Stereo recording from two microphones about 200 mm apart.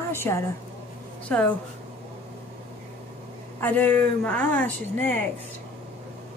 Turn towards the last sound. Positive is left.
turn(degrees=10)  # may be behind; listen again after turning